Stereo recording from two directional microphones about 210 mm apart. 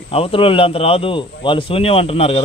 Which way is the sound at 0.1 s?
25° left (ahead or behind).